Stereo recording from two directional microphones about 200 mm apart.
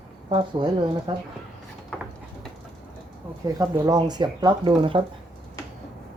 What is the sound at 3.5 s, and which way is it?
Speech, 15° right (ahead or behind).